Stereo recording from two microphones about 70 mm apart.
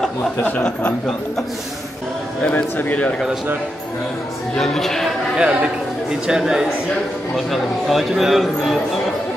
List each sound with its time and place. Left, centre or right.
0.4 s speech: left
0.7 s speech: centre
2.5 s speech: left
4.6 s speech: centre
5.4 s a man's voice: centre